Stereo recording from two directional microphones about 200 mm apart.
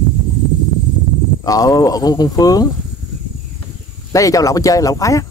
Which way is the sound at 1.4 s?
20° left (ahead or behind).